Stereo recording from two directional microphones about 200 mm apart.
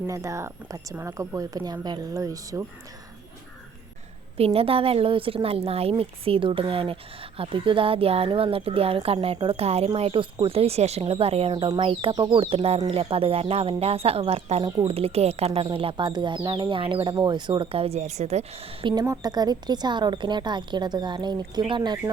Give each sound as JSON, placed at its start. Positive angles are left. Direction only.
{"t": 0.1, "sound": "a woman's voice", "side_deg": -15}
{"t": 4.4, "sound": "speech", "side_deg": -30}